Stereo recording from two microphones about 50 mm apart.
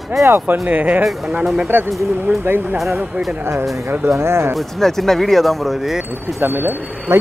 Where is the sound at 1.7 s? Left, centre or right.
Right.